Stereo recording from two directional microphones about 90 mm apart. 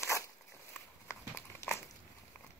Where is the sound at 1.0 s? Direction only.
30° left (ahead or behind).